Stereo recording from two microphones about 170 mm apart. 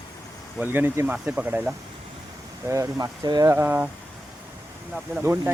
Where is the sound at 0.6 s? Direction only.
10° right (ahead or behind).